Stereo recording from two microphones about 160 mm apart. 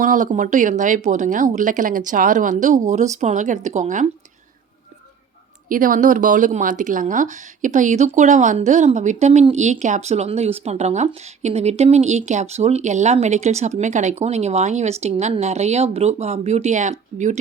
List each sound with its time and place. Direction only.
0.0 s speech: 55° right (ahead or behind)
5.6 s speech: 55° right (ahead or behind)